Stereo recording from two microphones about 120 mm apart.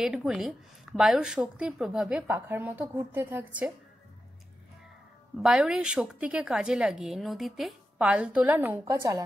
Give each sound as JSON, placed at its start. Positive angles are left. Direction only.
{"t": 0.0, "sound": "a woman's voice", "side_deg": -5}
{"t": 5.4, "sound": "a woman's voice", "side_deg": -5}